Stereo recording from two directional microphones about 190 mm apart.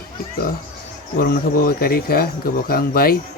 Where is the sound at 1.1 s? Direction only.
50° left (ahead or behind).